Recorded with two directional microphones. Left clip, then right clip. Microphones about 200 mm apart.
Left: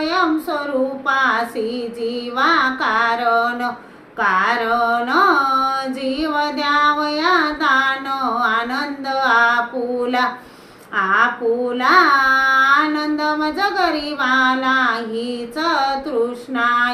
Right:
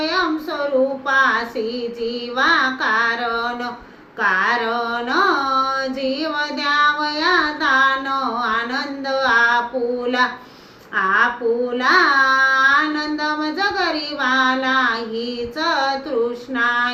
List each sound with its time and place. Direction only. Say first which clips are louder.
1.0 s child singing: even; 20° left (ahead or behind)
4.2 s carnatic music: left 1 dB; 20° left (ahead or behind)
10.9 s child singing: left 1 dB; 20° left (ahead or behind)